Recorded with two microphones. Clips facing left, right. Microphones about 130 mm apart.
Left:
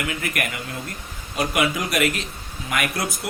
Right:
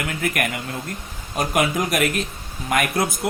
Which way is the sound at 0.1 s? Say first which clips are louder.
Right 3 dB; 45° right (ahead or behind).